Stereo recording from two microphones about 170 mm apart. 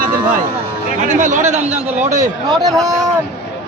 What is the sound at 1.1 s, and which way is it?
A man's voice, 45° right (ahead or behind).